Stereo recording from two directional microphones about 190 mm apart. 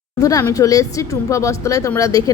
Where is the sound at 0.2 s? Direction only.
20° left (ahead or behind).